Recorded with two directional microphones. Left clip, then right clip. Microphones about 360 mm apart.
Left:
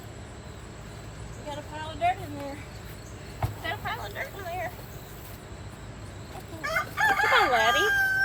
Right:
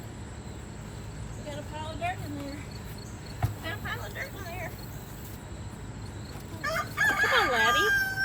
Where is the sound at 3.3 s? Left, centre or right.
Left.